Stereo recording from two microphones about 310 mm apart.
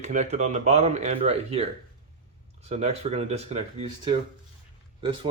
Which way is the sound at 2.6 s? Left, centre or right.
Centre.